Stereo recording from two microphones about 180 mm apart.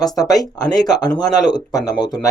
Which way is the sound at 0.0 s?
20° left (ahead or behind).